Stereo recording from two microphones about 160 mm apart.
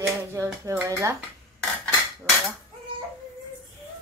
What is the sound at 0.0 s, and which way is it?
Speech, 15° right (ahead or behind).